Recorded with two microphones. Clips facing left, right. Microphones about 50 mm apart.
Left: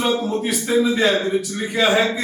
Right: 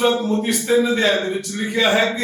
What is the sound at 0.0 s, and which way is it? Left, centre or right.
A man's voice, centre.